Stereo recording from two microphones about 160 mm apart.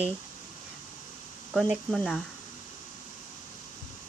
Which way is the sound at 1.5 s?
Centre (ahead or behind).